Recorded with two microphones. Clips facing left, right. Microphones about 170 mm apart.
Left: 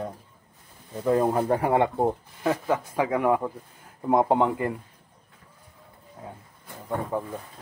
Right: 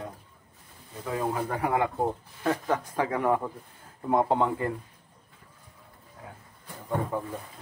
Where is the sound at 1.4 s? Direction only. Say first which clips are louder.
Left 5 dB; 30° left (ahead or behind).